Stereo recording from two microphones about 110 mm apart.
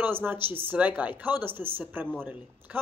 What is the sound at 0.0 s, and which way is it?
Speech, 20° right (ahead or behind).